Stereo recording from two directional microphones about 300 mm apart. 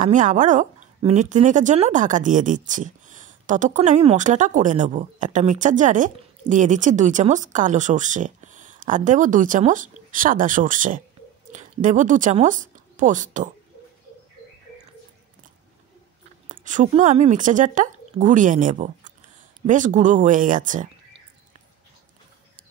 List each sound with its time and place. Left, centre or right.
0.0 s a woman's voice: right
16.4 s a woman's voice: right